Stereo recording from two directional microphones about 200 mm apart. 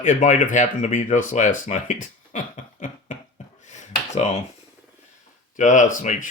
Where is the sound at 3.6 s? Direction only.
35° left (ahead or behind).